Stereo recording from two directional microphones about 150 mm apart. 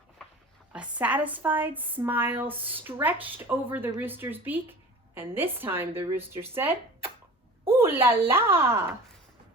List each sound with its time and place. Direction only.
0.7 s speech: 10° right (ahead or behind)
7.7 s speech: 15° right (ahead or behind)